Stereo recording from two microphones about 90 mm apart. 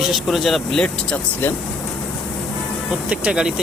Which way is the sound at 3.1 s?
10° right (ahead or behind).